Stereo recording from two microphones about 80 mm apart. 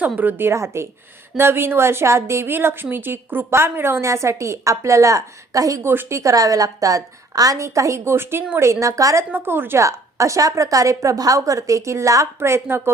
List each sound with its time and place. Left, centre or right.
0.2 s a woman's voice: right
5.9 s a woman's voice: right
6.1 s a woman's voice: right
9.3 s a woman's voice: right
9.8 s a woman's voice: right